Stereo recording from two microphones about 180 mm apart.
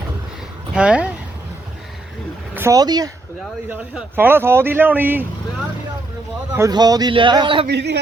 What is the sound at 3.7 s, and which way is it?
A man's voice, 10° right (ahead or behind).